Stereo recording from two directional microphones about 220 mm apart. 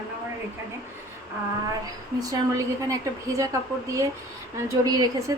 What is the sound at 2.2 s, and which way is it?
A woman's voice, 15° right (ahead or behind).